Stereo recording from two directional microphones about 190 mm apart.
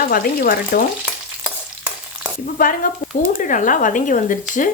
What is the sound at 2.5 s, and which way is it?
Speech, 45° left (ahead or behind).